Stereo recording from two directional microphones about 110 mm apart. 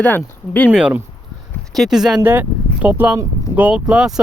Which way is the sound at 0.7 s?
10° right (ahead or behind).